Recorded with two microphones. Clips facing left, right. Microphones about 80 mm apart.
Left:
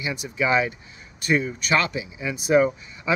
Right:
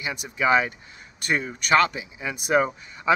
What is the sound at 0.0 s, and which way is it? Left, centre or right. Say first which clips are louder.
Speech: even; right.